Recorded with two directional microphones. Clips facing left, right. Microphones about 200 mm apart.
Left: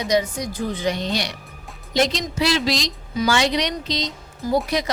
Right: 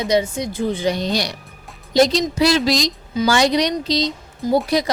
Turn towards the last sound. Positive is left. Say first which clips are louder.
# right 3 dB
turn(degrees=-20)  # may be behind; listen again after turning